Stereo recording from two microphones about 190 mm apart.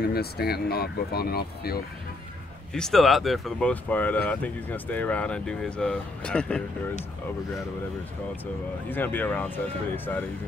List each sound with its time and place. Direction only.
0.0 s speech: 55° left (ahead or behind)
2.7 s speech: centre (ahead or behind)
8.8 s speech: 10° left (ahead or behind)